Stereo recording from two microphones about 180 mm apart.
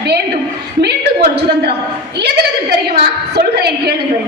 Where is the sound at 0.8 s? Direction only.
65° right (ahead or behind).